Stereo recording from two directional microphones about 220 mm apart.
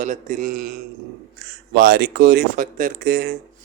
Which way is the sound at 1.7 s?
45° right (ahead or behind).